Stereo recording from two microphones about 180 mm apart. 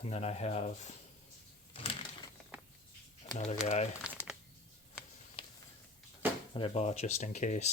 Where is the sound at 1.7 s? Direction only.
30° left (ahead or behind).